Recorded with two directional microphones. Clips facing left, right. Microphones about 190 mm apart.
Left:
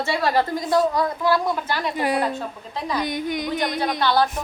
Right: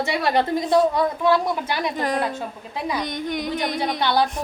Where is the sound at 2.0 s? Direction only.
10° left (ahead or behind).